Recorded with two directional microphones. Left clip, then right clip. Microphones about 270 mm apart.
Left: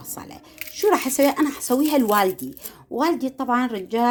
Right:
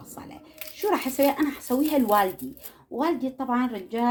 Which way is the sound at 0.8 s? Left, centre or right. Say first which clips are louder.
Left 5 dB; left.